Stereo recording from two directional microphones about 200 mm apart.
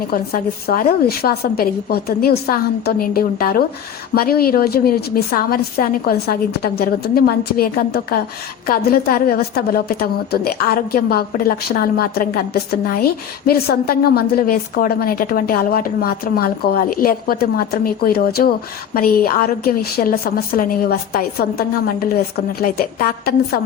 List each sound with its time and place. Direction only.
0.1 s a woman's voice: 45° left (ahead or behind)
13.5 s a woman's voice: 50° left (ahead or behind)